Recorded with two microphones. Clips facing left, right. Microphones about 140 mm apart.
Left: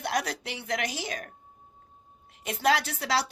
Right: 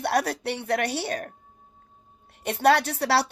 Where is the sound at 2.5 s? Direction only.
60° right (ahead or behind).